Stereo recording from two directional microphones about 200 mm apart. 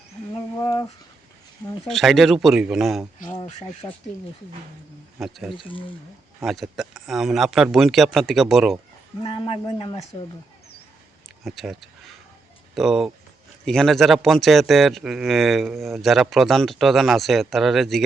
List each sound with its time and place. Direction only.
0.6 s a sound: 20° left (ahead or behind)
1.9 s speech: centre (ahead or behind)
3.2 s speech: 40° left (ahead or behind)
3.8 s speech: 15° left (ahead or behind)
5.2 s speech: centre (ahead or behind)
5.5 s speech: 25° left (ahead or behind)
6.4 s speech: centre (ahead or behind)
9.2 s speech: 25° left (ahead or behind)
11.4 s speech: centre (ahead or behind)